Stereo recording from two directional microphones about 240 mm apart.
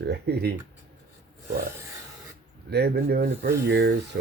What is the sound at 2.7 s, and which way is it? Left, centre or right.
Speech, right.